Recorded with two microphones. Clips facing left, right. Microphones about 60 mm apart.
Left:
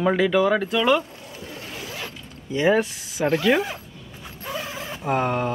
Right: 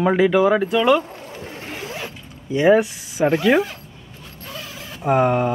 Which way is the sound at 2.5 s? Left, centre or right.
Centre.